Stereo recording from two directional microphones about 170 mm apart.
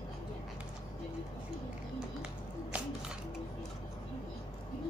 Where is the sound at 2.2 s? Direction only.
10° right (ahead or behind).